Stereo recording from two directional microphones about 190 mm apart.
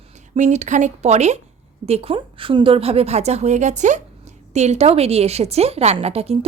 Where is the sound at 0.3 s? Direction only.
40° right (ahead or behind).